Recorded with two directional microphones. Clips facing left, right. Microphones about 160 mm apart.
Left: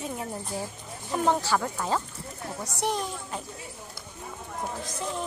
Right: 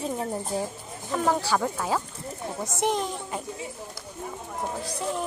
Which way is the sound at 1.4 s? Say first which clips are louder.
Right 2 dB; 15° right (ahead or behind).